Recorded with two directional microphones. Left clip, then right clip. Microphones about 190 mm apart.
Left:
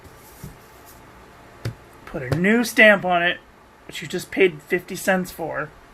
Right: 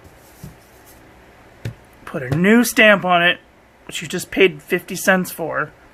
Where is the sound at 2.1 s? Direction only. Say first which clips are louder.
Right 4 dB; 25° right (ahead or behind).